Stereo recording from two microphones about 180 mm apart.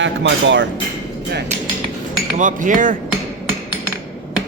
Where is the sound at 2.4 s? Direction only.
45° right (ahead or behind).